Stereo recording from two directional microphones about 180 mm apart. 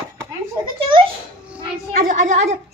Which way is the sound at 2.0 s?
45° right (ahead or behind).